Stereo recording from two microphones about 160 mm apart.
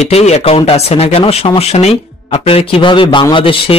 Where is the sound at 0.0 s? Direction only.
45° left (ahead or behind).